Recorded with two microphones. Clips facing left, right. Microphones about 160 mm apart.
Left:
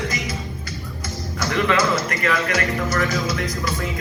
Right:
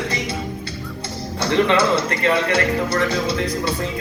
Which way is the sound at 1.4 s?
30° right (ahead or behind).